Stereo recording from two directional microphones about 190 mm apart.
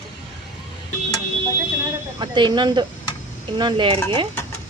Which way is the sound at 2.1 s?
25° right (ahead or behind).